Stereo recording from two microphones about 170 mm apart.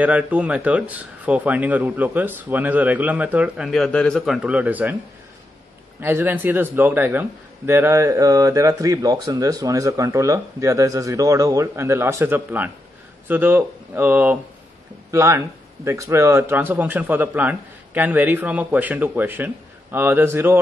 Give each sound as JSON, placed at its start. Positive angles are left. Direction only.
{"t": 0.0, "sound": "speech", "side_deg": -10}
{"t": 5.9, "sound": "speech", "side_deg": -10}